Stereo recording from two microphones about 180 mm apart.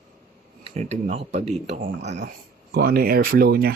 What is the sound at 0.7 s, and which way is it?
Speech, 35° right (ahead or behind).